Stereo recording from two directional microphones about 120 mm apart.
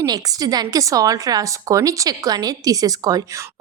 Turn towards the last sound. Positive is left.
turn(degrees=-30)  # may be behind; listen again after turning